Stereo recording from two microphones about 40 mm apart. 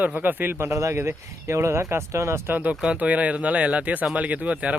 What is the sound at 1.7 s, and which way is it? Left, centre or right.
Speech, right.